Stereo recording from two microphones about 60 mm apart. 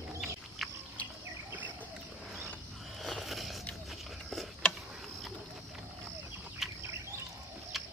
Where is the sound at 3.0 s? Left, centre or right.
Centre.